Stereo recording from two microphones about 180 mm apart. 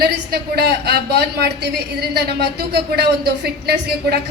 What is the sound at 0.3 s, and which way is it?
A woman's voice, 60° right (ahead or behind).